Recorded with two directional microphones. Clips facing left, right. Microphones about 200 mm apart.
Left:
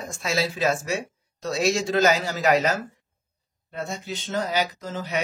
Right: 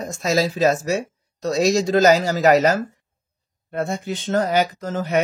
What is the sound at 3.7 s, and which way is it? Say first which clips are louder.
Speech: right 7 dB; 55° right (ahead or behind).